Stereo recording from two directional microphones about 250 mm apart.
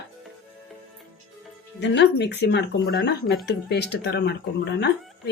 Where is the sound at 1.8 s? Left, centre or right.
Left.